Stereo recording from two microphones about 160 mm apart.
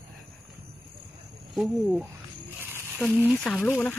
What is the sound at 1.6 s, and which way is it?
Speech, centre (ahead or behind).